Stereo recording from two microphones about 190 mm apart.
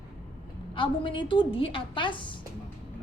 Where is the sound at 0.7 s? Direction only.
25° left (ahead or behind).